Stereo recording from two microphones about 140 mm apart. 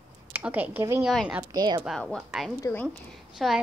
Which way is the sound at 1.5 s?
30° right (ahead or behind).